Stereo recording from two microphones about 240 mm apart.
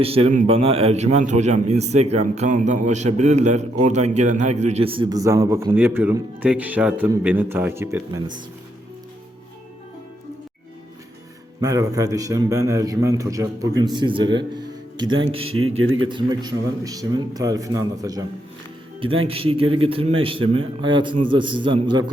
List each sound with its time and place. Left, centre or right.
0.0 s a man's voice: right
11.6 s a man's voice: centre
15.0 s speech: right
16.0 s a man's voice: centre